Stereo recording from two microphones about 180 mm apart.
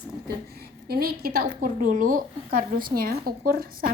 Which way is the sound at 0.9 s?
60° right (ahead or behind).